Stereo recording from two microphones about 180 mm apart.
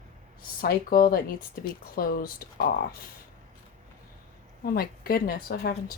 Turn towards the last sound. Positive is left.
turn(degrees=60)  # may be behind; listen again after turning